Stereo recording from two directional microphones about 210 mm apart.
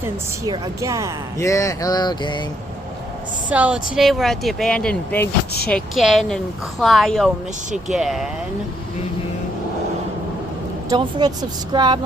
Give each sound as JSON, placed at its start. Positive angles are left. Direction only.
{"t": 0.4, "sound": "a woman's voice", "side_deg": -15}
{"t": 1.4, "sound": "a sound", "side_deg": 15}
{"t": 3.5, "sound": "speech", "side_deg": -5}
{"t": 10.8, "sound": "speech", "side_deg": -20}